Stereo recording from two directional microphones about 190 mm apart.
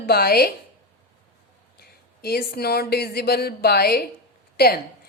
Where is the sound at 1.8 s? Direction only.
55° left (ahead or behind).